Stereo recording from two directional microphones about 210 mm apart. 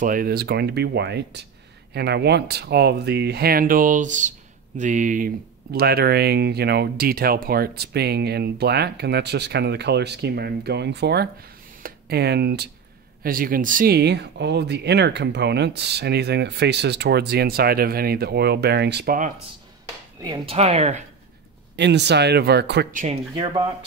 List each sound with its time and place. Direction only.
0.0 s speech: 40° right (ahead or behind)
20.2 s speech: 20° right (ahead or behind)
20.5 s speech: 30° right (ahead or behind)
21.7 s speech: 55° right (ahead or behind)